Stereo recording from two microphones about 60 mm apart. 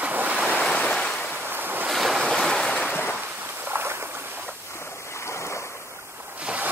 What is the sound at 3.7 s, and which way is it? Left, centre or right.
Boat, right.